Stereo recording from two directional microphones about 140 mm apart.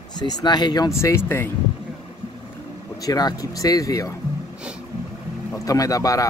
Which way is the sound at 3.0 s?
25° left (ahead or behind).